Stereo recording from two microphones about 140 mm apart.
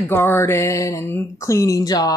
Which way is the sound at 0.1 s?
15° left (ahead or behind).